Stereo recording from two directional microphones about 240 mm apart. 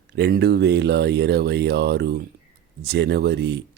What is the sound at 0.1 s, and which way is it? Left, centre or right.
Speech, right.